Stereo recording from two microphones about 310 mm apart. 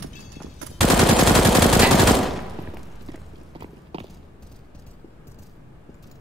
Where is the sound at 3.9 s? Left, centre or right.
Centre.